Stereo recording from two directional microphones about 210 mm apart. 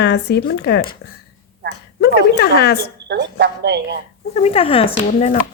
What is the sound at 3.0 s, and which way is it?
Speech, 55° right (ahead or behind).